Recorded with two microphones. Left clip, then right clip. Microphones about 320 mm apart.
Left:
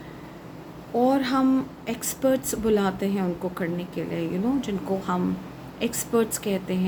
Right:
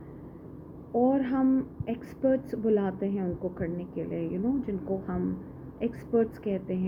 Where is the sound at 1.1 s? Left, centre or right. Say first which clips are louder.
Left 4 dB; centre.